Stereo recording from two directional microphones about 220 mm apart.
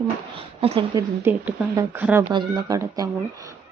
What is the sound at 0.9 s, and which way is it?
Speech, 10° right (ahead or behind).